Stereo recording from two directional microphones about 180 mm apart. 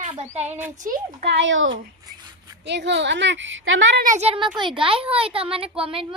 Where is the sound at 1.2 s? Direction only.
85° right.